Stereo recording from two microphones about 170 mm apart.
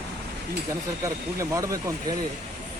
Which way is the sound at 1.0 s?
20° right (ahead or behind).